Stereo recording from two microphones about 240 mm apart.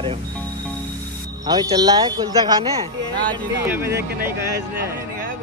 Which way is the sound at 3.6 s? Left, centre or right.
Centre.